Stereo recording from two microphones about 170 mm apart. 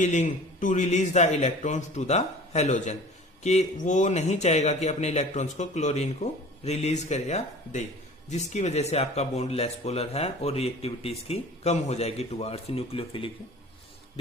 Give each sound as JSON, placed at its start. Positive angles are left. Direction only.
{"t": 0.0, "sound": "a man's voice", "side_deg": 45}